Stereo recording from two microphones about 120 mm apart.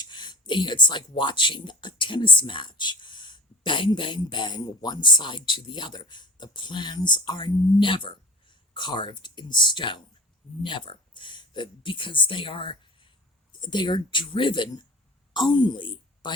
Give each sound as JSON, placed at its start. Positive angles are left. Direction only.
{"t": 0.0, "sound": "a woman's voice", "side_deg": 40}